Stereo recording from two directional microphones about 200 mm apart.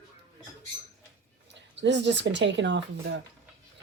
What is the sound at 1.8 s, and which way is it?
Speech, 60° right (ahead or behind).